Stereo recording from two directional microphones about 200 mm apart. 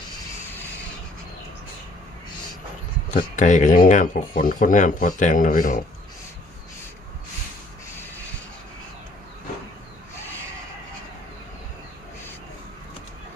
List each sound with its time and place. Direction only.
3.1 s speech: 40° left (ahead or behind)